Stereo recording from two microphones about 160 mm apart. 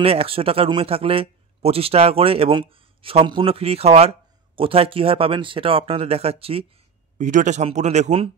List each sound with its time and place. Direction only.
0.0 s speech: 35° right (ahead or behind)
7.2 s speech: 50° right (ahead or behind)